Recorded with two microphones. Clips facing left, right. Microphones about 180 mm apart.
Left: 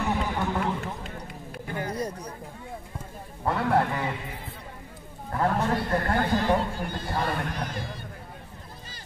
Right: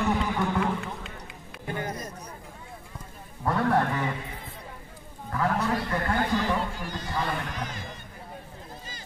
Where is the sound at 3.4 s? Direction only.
25° left (ahead or behind).